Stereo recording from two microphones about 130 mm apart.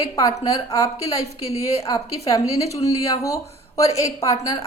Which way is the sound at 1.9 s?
25° left (ahead or behind).